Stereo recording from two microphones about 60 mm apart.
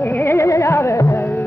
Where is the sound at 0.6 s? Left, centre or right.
Left.